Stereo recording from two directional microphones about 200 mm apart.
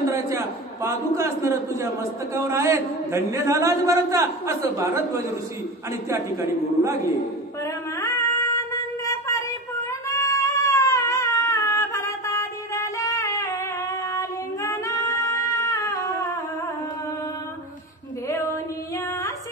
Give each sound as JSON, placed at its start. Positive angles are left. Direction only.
{"t": 0.8, "sound": "a man's voice", "side_deg": -15}
{"t": 8.0, "sound": "music", "side_deg": 15}
{"t": 10.0, "sound": "cat", "side_deg": 15}
{"t": 14.1, "sound": "child singing", "side_deg": 15}